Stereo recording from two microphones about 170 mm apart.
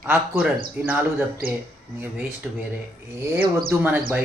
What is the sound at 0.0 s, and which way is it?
Speech, 5° right (ahead or behind).